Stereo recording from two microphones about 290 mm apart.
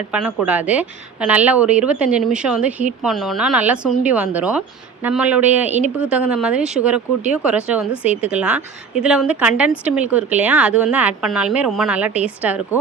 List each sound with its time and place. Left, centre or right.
0.1 s a woman's voice: centre